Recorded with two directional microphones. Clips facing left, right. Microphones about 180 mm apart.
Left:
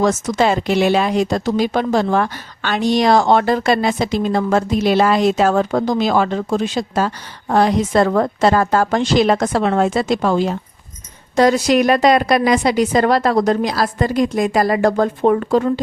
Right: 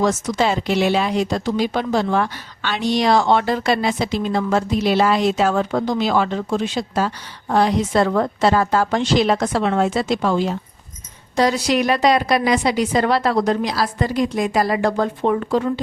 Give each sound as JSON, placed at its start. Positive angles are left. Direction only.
{"t": 0.0, "sound": "speech", "side_deg": 50}